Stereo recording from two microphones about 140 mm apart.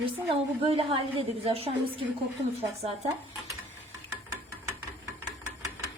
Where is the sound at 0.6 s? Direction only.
45° right (ahead or behind).